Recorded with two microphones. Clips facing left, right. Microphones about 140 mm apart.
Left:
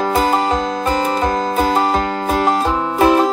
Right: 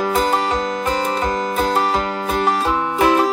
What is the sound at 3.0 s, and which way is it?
Music, 25° left (ahead or behind).